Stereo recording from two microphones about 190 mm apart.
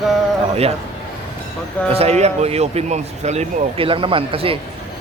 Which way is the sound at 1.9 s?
35° right (ahead or behind).